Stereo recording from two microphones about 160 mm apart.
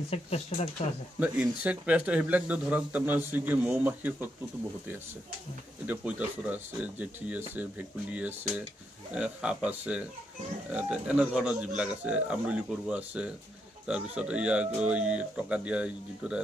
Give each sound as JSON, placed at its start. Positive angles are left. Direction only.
{"t": 0.1, "sound": "speech", "side_deg": 40}
{"t": 1.2, "sound": "speech", "side_deg": -10}
{"t": 5.9, "sound": "speech", "side_deg": -10}